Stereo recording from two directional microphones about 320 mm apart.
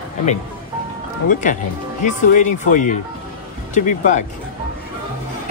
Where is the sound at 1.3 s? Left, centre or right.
Left.